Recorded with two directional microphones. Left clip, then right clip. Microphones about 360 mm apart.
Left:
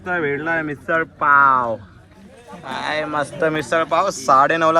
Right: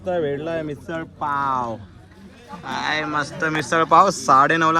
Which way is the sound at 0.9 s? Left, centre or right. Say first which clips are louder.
Left 11 dB; left.